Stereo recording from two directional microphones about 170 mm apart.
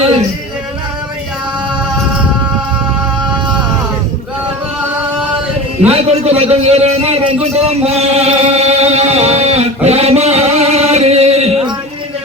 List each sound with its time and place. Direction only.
5.9 s a man's voice: 40° right (ahead or behind)